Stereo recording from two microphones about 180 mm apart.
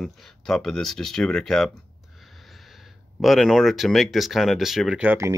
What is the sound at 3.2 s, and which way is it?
Speech, centre (ahead or behind).